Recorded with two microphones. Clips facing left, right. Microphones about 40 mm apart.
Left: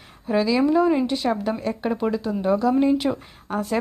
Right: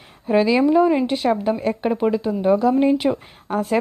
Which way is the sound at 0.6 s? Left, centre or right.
Centre.